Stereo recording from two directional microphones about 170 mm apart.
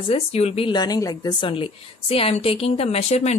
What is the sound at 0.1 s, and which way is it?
Speech, 40° left (ahead or behind).